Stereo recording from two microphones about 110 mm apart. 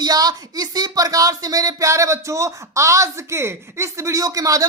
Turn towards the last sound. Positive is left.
turn(degrees=-30)  # may be behind; listen again after turning